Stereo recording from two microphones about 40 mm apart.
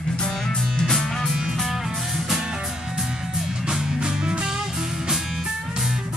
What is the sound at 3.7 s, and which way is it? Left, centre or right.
Music, centre.